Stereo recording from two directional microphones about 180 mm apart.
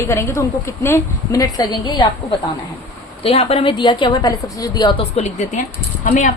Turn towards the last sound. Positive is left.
turn(degrees=45)  # may be behind; listen again after turning